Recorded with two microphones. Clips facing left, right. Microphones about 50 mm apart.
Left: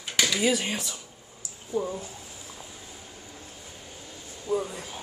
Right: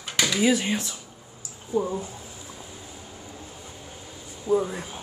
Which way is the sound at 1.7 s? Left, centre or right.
Centre.